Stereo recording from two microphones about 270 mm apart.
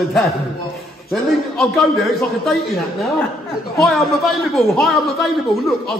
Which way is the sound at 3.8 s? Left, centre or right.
Centre.